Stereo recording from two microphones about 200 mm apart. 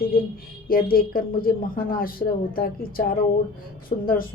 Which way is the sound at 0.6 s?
45° left (ahead or behind).